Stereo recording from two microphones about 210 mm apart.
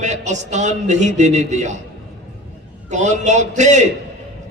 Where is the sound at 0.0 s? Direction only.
35° right (ahead or behind).